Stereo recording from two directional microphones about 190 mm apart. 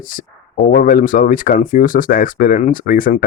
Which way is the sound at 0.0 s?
45° left (ahead or behind).